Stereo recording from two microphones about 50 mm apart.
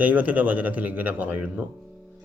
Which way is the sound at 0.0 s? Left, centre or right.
Right.